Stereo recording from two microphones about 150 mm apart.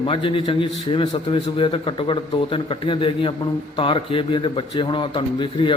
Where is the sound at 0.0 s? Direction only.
35° left (ahead or behind).